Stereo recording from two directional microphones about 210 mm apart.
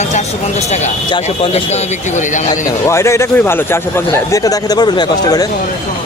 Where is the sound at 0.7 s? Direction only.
30° left (ahead or behind).